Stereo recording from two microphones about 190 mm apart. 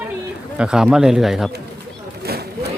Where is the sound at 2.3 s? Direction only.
55° right (ahead or behind).